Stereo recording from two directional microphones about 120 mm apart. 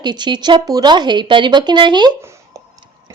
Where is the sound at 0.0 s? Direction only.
40° right (ahead or behind).